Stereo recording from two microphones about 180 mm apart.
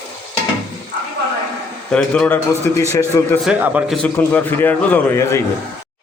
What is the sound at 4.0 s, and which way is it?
A man's voice, 10° left (ahead or behind).